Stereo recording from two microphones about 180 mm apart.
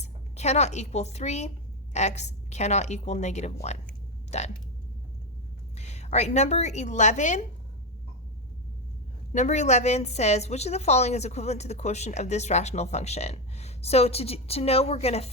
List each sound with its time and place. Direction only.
0.0 s speech: 40° left (ahead or behind)
5.7 s a woman's voice: 40° left (ahead or behind)
9.3 s a woman's voice: 40° left (ahead or behind)